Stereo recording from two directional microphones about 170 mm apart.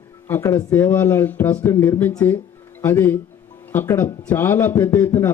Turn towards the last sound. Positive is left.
turn(degrees=10)  # may be behind; listen again after turning